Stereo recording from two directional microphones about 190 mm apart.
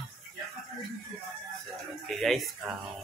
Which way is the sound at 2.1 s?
Centre (ahead or behind).